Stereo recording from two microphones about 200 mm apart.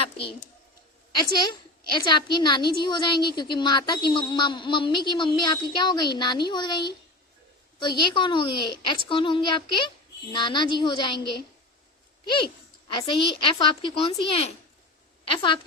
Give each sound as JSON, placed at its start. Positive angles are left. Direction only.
{"t": 0.0, "sound": "a sound", "side_deg": 30}
{"t": 1.9, "sound": "a woman's voice", "side_deg": 25}
{"t": 12.9, "sound": "a woman's voice", "side_deg": 25}